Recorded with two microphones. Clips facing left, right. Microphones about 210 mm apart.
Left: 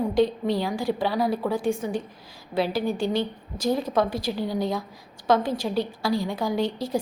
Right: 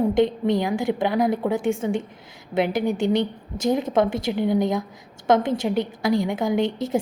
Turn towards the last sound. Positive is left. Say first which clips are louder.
# right 3 dB
turn(degrees=-20)  # may be behind; listen again after turning